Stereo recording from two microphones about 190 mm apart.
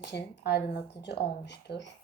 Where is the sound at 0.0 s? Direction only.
60° left (ahead or behind).